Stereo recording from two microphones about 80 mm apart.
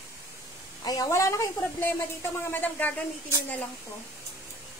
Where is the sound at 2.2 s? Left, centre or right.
Left.